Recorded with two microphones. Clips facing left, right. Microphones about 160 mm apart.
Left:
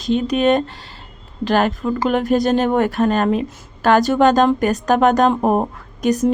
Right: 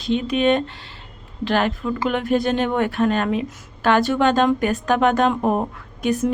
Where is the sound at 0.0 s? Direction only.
40° left (ahead or behind).